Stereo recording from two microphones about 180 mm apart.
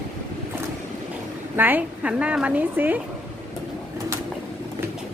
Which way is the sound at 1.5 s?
10° right (ahead or behind).